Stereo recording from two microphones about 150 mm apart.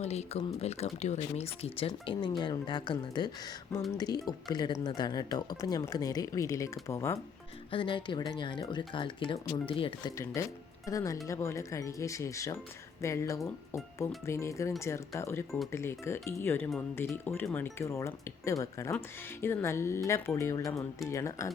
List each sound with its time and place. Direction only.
0.0 s speech: 45° left (ahead or behind); by 7.2 s 20° left (ahead or behind)
7.7 s speech: 35° left (ahead or behind)
10.4 s speech: 20° left (ahead or behind)